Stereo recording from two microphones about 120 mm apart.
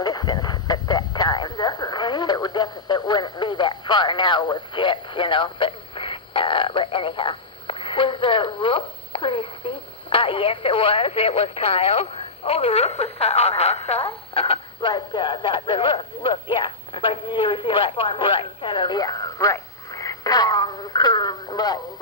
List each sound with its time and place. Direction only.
0.0 s radio: 35° left (ahead or behind)